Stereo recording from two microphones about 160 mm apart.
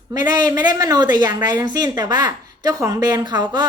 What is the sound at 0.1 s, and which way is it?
Speech, 25° right (ahead or behind).